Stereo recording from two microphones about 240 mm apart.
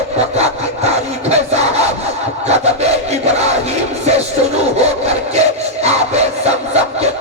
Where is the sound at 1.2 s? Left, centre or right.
Right.